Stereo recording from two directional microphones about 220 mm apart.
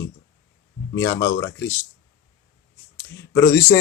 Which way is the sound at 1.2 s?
55° left (ahead or behind).